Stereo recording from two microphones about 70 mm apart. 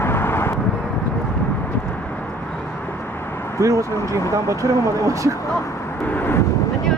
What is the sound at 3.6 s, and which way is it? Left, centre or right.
Speech, right.